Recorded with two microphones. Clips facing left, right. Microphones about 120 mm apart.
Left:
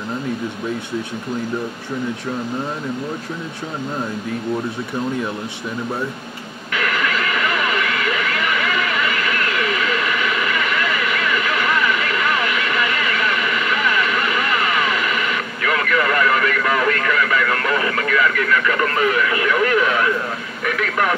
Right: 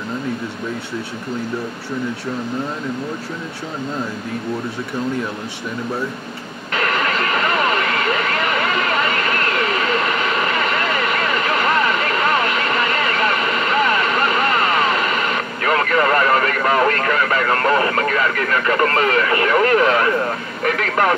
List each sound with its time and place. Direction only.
6.7 s vehicle: 40° right (ahead or behind)
20.6 s speech: 45° right (ahead or behind)